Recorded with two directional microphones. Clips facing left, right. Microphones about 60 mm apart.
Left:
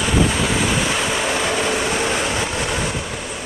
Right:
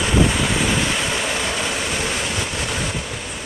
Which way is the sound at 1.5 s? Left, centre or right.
Centre.